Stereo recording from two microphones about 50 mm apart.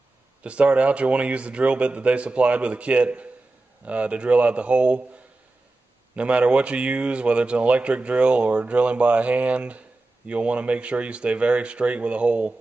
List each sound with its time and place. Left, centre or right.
0.4 s speech: right